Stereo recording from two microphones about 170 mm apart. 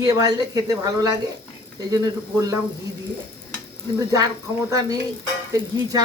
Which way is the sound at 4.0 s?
20° right (ahead or behind).